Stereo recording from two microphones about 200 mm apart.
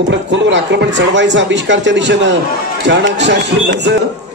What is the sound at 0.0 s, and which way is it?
Speech, 65° right (ahead or behind).